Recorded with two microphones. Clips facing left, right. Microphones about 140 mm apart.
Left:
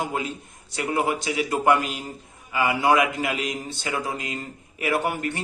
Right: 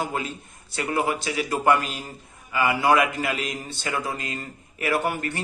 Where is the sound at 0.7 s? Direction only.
20° left (ahead or behind).